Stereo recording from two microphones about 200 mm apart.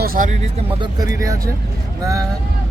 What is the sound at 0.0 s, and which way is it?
Speech, 45° right (ahead or behind).